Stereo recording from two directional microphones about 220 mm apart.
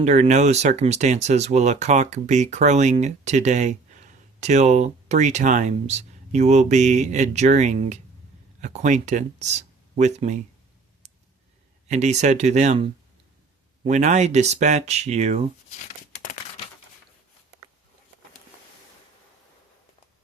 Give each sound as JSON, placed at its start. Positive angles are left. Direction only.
{"t": 0.0, "sound": "speech", "side_deg": -30}
{"t": 11.9, "sound": "speech", "side_deg": -30}